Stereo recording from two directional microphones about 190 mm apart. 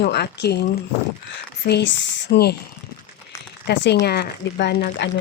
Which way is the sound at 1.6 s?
60° left (ahead or behind).